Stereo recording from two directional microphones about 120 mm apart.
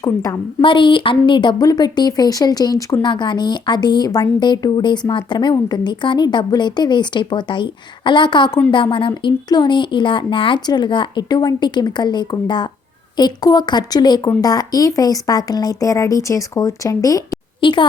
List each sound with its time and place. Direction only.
0.0 s a woman's voice: 30° left (ahead or behind)
0.6 s a woman's voice: 45° left (ahead or behind)
17.6 s a woman's voice: 40° left (ahead or behind)